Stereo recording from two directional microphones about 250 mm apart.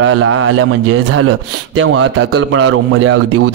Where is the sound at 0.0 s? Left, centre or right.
Right.